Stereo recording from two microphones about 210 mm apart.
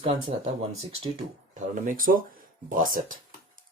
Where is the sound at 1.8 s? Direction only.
40° right (ahead or behind).